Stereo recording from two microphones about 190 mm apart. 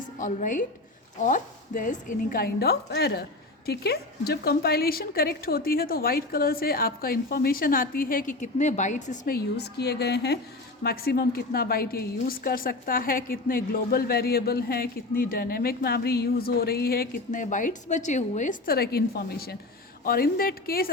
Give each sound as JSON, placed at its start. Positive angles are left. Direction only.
{"t": 0.2, "sound": "a woman's voice", "side_deg": 40}